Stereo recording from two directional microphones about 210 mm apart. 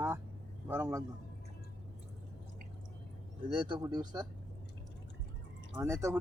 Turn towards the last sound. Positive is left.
turn(degrees=-15)  # may be behind; listen again after turning